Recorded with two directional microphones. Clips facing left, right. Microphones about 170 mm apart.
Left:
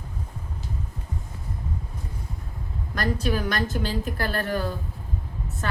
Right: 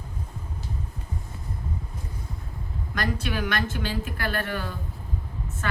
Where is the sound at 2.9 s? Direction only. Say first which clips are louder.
Left 3 dB; 40° left (ahead or behind).